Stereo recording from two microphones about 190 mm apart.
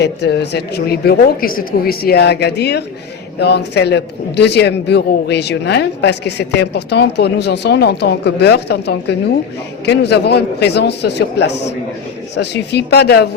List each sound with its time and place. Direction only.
0.0 s a man's voice: 60° left (ahead or behind)